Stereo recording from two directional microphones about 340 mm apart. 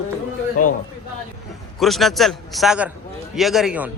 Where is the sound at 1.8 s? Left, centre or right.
Centre.